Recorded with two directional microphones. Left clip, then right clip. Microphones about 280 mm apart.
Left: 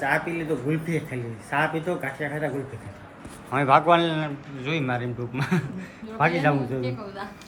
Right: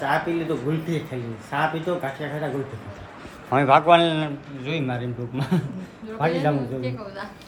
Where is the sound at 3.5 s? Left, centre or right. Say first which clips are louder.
Right 3 dB; centre.